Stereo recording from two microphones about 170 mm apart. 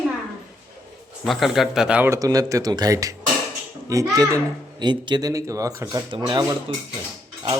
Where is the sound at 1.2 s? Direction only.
Centre (ahead or behind).